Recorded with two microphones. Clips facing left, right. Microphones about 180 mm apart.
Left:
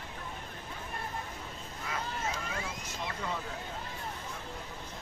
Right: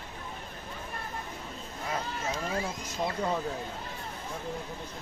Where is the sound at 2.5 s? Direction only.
35° right (ahead or behind).